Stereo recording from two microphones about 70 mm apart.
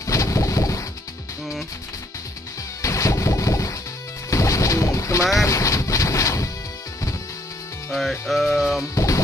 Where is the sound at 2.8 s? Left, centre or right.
Left.